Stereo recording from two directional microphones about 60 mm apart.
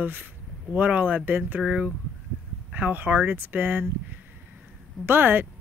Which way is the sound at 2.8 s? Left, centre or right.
Right.